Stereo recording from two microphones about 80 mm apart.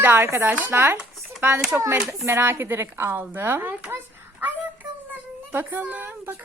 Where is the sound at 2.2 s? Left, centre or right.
Right.